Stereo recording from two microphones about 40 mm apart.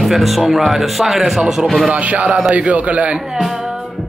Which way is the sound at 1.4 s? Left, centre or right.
Centre.